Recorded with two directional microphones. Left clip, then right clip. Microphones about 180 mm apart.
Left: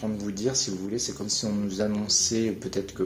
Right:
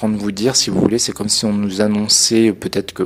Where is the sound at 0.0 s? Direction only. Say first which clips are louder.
Right 11 dB; 50° right (ahead or behind).